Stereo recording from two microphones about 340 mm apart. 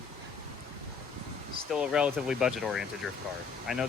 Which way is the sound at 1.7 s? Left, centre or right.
Centre.